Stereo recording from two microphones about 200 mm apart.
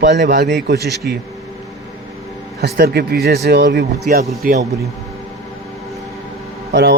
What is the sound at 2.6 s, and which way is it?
A man's voice, 50° right (ahead or behind).